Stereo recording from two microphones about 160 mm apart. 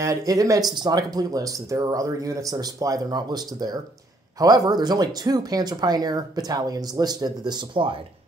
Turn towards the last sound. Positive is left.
turn(degrees=-30)  # may be behind; listen again after turning